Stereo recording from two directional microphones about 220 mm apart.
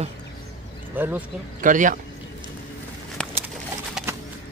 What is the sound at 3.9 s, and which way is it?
Horse, 10° right (ahead or behind).